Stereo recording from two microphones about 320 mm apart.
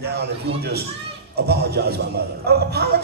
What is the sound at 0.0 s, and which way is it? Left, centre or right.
A man's voice, right.